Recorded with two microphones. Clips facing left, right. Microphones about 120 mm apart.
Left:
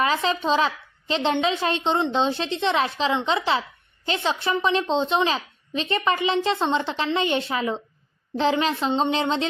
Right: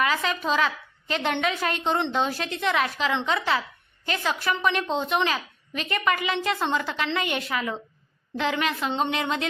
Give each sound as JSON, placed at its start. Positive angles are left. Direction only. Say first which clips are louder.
{"t": 0.0, "sound": "a woman's voice", "louder": "left 3 dB", "side_deg": 30}